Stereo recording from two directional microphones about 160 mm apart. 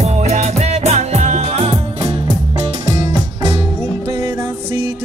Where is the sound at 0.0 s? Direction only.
45° right (ahead or behind).